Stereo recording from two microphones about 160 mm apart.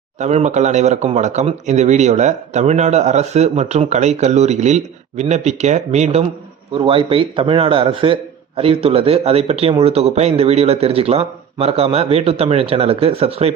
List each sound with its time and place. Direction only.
0.2 s a man's voice: 45° right (ahead or behind)